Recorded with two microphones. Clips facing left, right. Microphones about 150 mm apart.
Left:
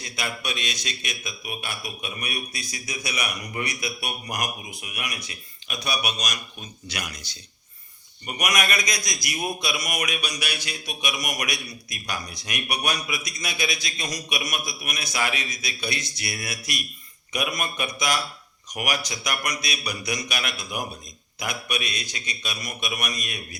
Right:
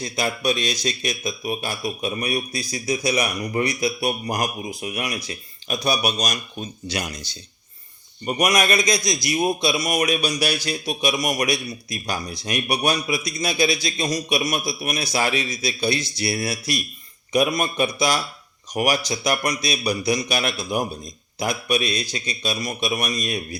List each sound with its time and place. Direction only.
0.0 s a man's voice: 35° right (ahead or behind)